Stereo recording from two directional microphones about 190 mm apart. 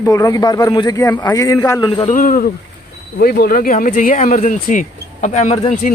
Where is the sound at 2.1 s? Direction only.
45° left (ahead or behind).